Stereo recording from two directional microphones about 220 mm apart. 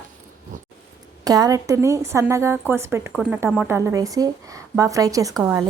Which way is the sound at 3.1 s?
Centre (ahead or behind).